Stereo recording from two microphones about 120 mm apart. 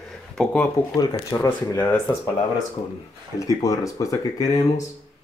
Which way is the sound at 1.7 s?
20° left (ahead or behind).